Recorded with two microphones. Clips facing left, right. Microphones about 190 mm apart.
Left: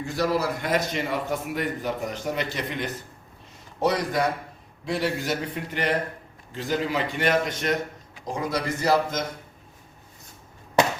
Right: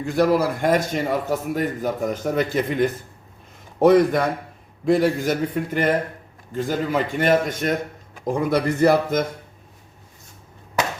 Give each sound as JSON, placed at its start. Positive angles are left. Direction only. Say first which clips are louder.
{"t": 0.0, "sound": "a man's voice", "louder": "right 6 dB", "side_deg": -55}